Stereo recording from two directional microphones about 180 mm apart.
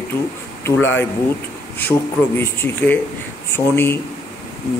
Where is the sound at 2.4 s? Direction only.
10° left (ahead or behind).